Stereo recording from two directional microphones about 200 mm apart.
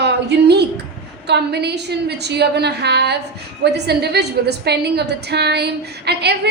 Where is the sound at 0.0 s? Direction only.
55° right (ahead or behind).